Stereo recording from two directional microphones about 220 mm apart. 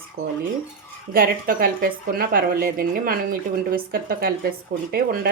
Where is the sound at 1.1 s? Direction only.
40° right (ahead or behind).